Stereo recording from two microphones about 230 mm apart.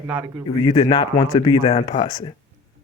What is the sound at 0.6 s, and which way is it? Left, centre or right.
Speech, left.